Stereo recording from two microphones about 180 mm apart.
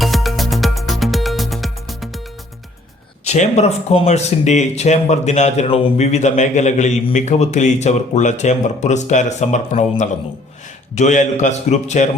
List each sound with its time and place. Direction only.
0.0 s music: centre (ahead or behind)
3.2 s speech: 40° left (ahead or behind)